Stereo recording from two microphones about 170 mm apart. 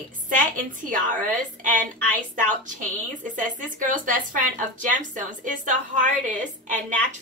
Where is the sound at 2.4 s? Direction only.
50° right (ahead or behind).